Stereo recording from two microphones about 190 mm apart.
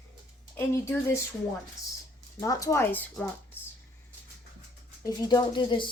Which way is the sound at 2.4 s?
15° left (ahead or behind).